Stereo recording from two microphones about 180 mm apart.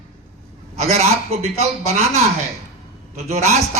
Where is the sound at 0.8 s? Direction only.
35° right (ahead or behind).